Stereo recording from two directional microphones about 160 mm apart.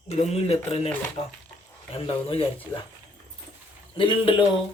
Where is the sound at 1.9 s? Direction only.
35° left (ahead or behind).